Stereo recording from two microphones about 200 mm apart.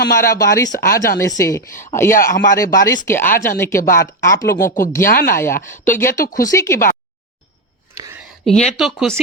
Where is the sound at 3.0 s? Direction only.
10° left (ahead or behind).